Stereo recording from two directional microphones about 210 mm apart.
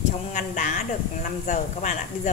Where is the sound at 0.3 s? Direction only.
35° left (ahead or behind).